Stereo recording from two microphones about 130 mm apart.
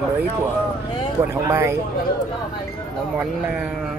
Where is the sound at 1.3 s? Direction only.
20° right (ahead or behind).